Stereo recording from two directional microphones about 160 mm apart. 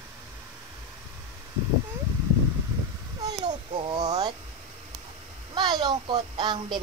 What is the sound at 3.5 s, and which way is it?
Speech, 30° right (ahead or behind).